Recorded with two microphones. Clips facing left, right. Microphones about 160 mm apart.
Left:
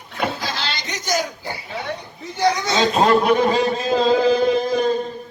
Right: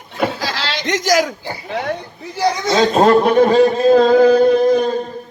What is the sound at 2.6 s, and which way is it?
Speech, 45° right (ahead or behind).